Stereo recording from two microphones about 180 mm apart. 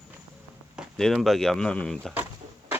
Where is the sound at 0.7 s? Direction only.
Centre (ahead or behind).